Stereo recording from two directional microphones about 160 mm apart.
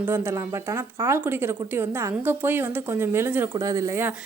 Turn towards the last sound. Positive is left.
turn(degrees=-15)  # may be behind; listen again after turning